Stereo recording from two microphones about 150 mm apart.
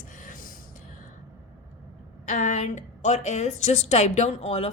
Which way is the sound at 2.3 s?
50° left (ahead or behind).